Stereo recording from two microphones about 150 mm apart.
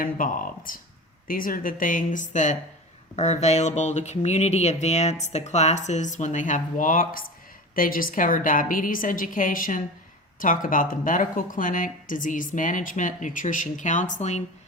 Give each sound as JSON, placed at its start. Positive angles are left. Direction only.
{"t": 0.0, "sound": "speech", "side_deg": 65}